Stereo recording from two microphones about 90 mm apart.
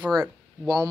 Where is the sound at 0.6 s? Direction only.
45° right (ahead or behind).